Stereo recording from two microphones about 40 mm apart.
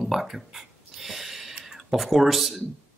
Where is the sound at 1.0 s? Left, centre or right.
Centre.